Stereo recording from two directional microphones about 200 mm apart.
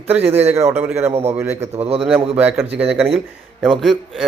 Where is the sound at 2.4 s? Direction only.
10° right (ahead or behind).